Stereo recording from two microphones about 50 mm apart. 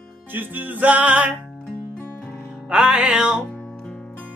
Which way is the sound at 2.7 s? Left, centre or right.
Centre.